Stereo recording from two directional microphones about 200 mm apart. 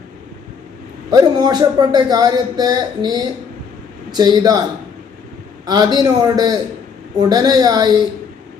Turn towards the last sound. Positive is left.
turn(degrees=-20)  # may be behind; listen again after turning